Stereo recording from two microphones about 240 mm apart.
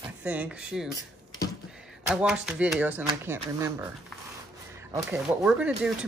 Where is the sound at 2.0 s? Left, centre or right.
Centre.